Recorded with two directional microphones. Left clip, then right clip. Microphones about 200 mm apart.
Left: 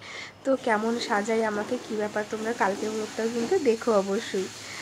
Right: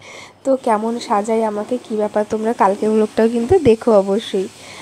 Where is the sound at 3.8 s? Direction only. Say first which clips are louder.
Right 10 dB; 30° right (ahead or behind).